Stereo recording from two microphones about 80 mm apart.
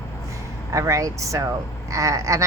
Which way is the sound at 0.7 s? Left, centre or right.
Right.